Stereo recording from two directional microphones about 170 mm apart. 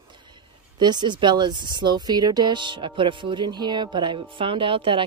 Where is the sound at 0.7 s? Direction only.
25° right (ahead or behind).